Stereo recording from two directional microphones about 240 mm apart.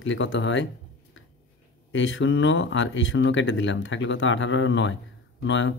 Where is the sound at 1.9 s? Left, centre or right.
Left.